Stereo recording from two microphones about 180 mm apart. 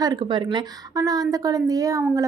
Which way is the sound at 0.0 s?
25° right (ahead or behind).